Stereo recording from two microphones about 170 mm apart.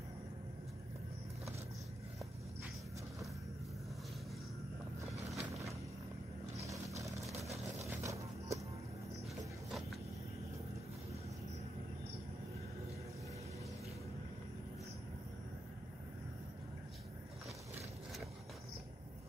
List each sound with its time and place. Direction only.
5.3 s vehicle: centre (ahead or behind)
7.8 s music: 20° right (ahead or behind)
9.7 s vehicle: centre (ahead or behind)